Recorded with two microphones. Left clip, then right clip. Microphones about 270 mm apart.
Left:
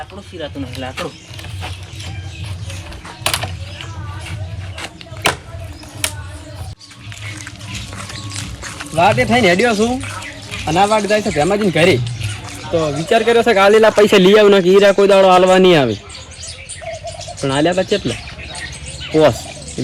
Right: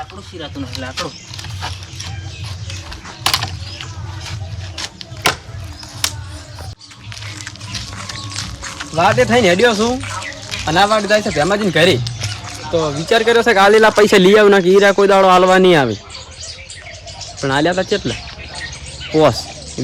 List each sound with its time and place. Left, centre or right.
0.3 s speech: centre
3.2 s a sound: centre
7.9 s music: centre
10.5 s speech: centre
17.4 s speech: centre
19.1 s speech: centre